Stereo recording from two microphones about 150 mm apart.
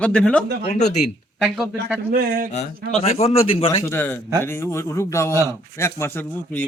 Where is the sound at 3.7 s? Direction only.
15° left (ahead or behind).